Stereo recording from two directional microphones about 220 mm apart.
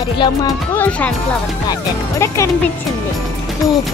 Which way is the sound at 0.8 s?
5° left (ahead or behind).